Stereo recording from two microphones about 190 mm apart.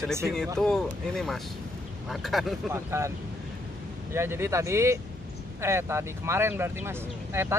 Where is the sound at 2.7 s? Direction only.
15° right (ahead or behind).